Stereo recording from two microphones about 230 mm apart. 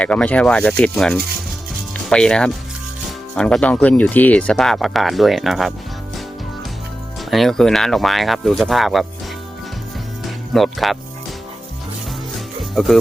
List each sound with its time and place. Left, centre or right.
0.0 s speech: centre
7.3 s speech: centre
10.2 s music: centre